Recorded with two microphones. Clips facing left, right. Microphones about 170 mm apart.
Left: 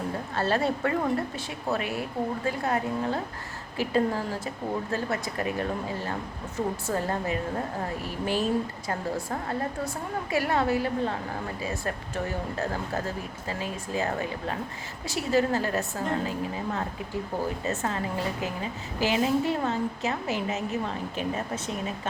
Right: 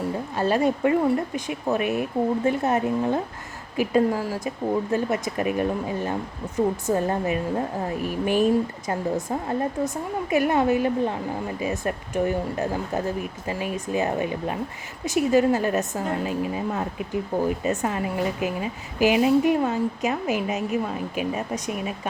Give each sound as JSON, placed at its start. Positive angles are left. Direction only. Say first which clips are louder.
{"t": 0.3, "sound": "a woman's voice", "louder": "right 4 dB", "side_deg": -15}